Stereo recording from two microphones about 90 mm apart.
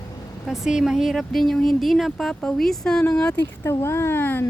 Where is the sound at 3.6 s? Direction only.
30° left (ahead or behind).